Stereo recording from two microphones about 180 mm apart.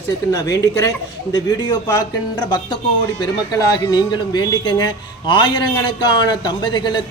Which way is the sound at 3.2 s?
20° left (ahead or behind).